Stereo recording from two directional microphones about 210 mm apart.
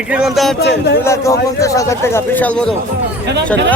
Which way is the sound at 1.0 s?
15° left (ahead or behind).